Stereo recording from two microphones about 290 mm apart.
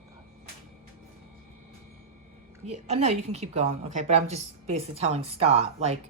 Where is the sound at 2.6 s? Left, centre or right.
Right.